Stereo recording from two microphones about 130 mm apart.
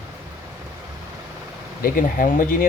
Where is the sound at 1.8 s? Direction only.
90° left.